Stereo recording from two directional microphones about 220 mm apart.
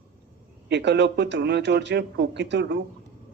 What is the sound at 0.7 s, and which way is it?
A man's voice, 50° right (ahead or behind).